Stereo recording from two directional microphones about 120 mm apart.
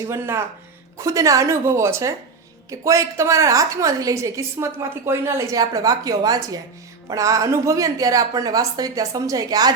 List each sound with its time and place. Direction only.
0.0 s a woman's voice: 20° right (ahead or behind)